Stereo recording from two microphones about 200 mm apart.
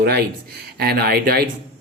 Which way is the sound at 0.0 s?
50° right (ahead or behind).